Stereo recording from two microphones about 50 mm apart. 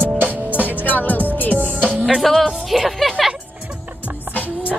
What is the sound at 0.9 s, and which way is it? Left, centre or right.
Music, left.